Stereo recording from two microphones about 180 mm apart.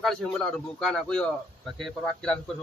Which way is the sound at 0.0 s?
5° left (ahead or behind).